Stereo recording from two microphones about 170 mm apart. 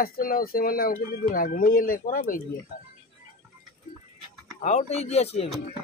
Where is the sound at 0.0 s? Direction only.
60° left (ahead or behind).